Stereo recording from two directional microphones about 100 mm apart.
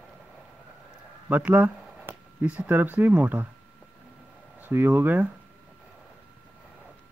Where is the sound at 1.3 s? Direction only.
15° right (ahead or behind).